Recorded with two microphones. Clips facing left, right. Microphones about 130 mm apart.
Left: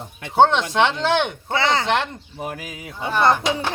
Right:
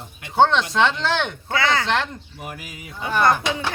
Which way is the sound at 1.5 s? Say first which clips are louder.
Left 1 dB; 30° left (ahead or behind).